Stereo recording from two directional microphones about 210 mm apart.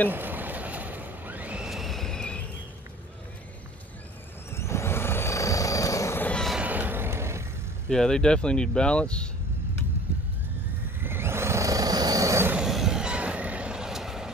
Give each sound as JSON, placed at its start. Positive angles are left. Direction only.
{"t": 0.1, "sound": "boat", "side_deg": -10}
{"t": 4.5, "sound": "vehicle", "side_deg": 15}
{"t": 7.9, "sound": "speech", "side_deg": 5}
{"t": 11.0, "sound": "music", "side_deg": -10}